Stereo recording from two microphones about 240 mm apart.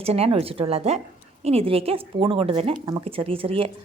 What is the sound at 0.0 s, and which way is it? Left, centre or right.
A woman's voice, right.